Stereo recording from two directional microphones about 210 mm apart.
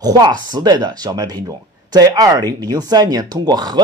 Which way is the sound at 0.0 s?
20° right (ahead or behind).